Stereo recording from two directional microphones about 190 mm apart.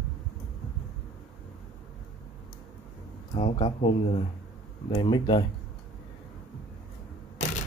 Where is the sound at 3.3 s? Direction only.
30° left (ahead or behind).